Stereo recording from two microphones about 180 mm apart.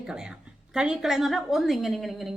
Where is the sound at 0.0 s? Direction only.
5° right (ahead or behind).